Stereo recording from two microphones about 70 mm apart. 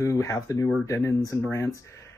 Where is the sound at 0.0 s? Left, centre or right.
Left.